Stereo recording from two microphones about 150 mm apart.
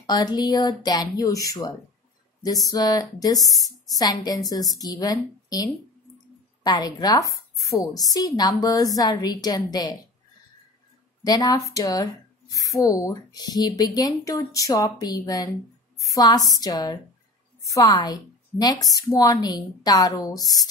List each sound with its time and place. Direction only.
0.0 s speech: 25° left (ahead or behind)
11.2 s speech: 25° left (ahead or behind)